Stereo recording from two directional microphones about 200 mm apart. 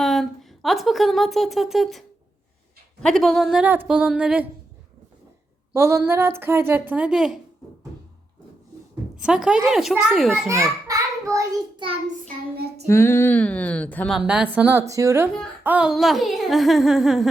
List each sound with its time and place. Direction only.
0.0 s speech: centre (ahead or behind)
5.7 s a woman's voice: 15° right (ahead or behind)
9.2 s speech: 5° right (ahead or behind)
10.5 s a child's voice: 15° right (ahead or behind)
12.9 s speech: 10° left (ahead or behind)